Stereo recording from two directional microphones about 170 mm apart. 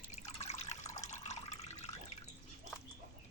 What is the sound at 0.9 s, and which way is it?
Water, 45° left (ahead or behind).